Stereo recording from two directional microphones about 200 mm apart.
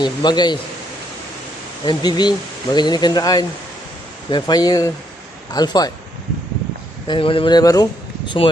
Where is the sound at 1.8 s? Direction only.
20° left (ahead or behind).